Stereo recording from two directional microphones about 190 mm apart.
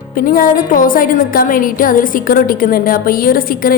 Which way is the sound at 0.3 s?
45° left (ahead or behind).